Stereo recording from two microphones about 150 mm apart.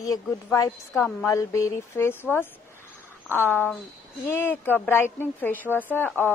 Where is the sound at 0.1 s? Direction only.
20° left (ahead or behind).